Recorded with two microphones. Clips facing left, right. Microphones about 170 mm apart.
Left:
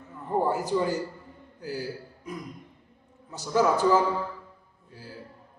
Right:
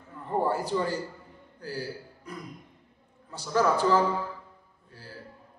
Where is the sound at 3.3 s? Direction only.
15° left (ahead or behind).